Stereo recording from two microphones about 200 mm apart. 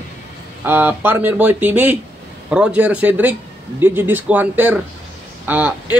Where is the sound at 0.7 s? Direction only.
10° right (ahead or behind).